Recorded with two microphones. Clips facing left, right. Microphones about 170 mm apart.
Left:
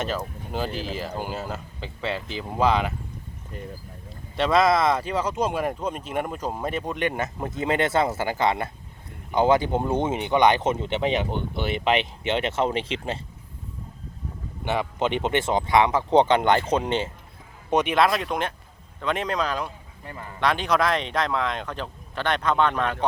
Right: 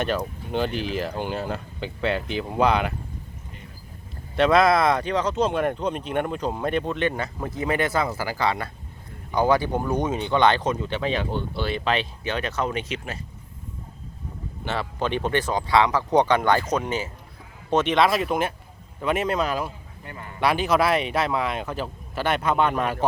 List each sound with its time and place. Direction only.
0.0 s speech: centre (ahead or behind)
0.7 s a man's voice: 35° left (ahead or behind)
0.9 s speech: centre (ahead or behind)
4.4 s speech: centre (ahead or behind); by 13.2 s 25° left (ahead or behind)
14.6 s speech: 15° left (ahead or behind)
17.7 s speech: 15° left (ahead or behind)
17.9 s speech: centre (ahead or behind)
20.1 s a man's voice: 30° left (ahead or behind)
20.4 s speech: 5° right (ahead or behind)